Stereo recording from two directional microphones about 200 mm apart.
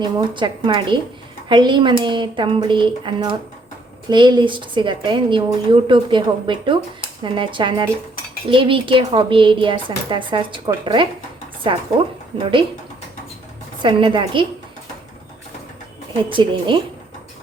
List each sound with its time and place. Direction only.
0.0 s speech: 25° right (ahead or behind)
13.8 s speech: 25° right (ahead or behind)
16.3 s speech: 25° right (ahead or behind)